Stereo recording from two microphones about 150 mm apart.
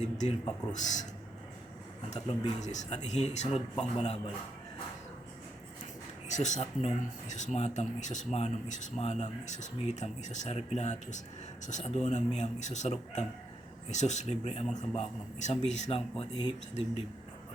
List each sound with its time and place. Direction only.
0.0 s speech: 45° left (ahead or behind)
2.0 s speech: 45° left (ahead or behind)
6.2 s speech: 50° left (ahead or behind)